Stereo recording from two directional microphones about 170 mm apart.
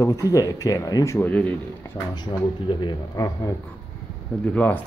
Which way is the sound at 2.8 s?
25° left (ahead or behind).